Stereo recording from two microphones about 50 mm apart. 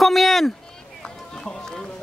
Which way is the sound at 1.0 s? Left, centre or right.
Centre.